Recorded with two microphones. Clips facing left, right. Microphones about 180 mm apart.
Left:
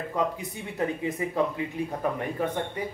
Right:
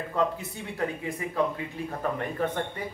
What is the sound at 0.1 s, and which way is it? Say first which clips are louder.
Speech: right 2 dB; 20° left (ahead or behind).